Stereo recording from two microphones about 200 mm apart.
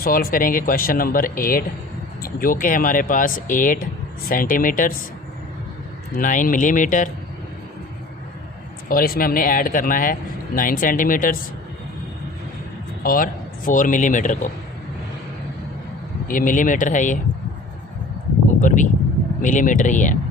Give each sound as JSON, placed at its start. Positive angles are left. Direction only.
{"t": 0.0, "sound": "speech", "side_deg": 45}
{"t": 6.1, "sound": "speech", "side_deg": 40}
{"t": 8.9, "sound": "speech", "side_deg": 45}
{"t": 13.0, "sound": "a man's voice", "side_deg": 45}
{"t": 16.2, "sound": "speech", "side_deg": 40}
{"t": 18.6, "sound": "speech", "side_deg": 40}